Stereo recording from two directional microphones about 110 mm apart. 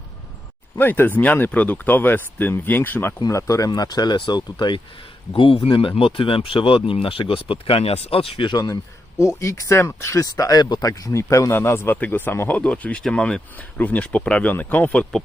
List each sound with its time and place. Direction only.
0.8 s speech: 20° left (ahead or behind)
3.2 s speech: 30° left (ahead or behind)
5.3 s speech: 55° left (ahead or behind); by 15.0 s 15° left (ahead or behind)